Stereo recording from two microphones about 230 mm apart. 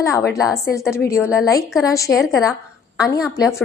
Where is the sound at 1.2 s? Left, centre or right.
Centre.